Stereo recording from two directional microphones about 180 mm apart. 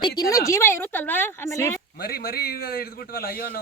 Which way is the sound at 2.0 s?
55° left (ahead or behind).